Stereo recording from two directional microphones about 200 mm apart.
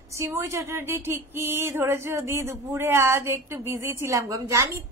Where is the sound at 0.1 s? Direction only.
15° right (ahead or behind).